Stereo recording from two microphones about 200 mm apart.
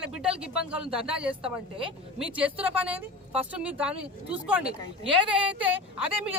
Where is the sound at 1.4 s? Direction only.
25° right (ahead or behind).